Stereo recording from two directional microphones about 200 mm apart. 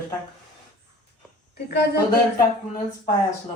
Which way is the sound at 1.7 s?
55° left (ahead or behind).